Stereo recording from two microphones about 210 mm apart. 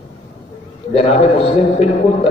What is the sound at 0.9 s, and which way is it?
Speech, 30° left (ahead or behind).